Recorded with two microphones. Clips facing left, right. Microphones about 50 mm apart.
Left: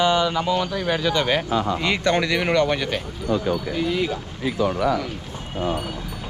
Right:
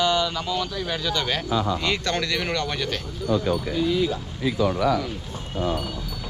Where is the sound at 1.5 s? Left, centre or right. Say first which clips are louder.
Left 2 dB; left.